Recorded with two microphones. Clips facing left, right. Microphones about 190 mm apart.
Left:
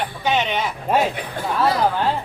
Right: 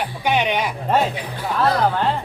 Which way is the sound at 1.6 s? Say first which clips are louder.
Right 1 dB; 5° left (ahead or behind).